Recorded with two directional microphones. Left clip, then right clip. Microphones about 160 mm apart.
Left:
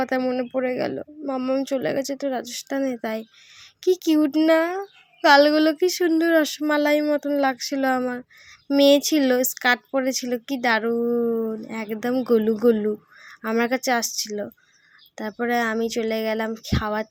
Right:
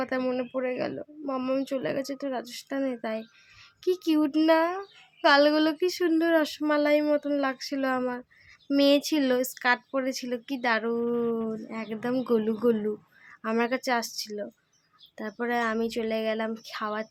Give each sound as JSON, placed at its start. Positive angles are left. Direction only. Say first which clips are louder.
{"t": 0.0, "sound": "speech", "louder": "left 5 dB", "side_deg": 25}